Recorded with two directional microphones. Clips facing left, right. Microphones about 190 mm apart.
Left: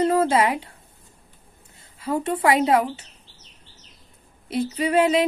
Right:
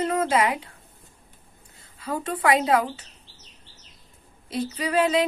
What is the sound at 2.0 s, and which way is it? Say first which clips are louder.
Speech: left 3 dB; 25° left (ahead or behind).